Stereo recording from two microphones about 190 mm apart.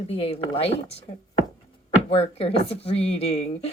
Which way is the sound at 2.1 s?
30° left (ahead or behind).